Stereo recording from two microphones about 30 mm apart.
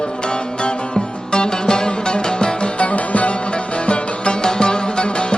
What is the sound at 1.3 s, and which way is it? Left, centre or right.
Music, left.